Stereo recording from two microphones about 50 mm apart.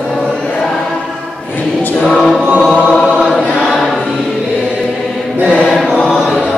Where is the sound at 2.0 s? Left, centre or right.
Centre.